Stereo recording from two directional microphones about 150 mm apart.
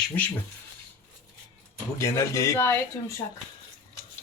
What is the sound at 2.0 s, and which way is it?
Speech, 20° left (ahead or behind).